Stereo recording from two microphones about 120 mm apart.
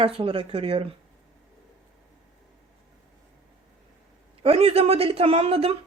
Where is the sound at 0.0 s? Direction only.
55° right (ahead or behind).